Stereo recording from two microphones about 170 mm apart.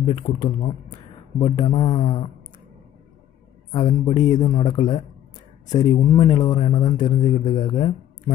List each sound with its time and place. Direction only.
0.0 s speech: 25° left (ahead or behind)
3.7 s speech: 25° left (ahead or behind)